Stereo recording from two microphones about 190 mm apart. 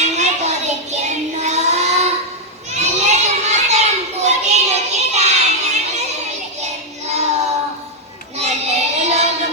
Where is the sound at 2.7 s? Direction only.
35° right (ahead or behind).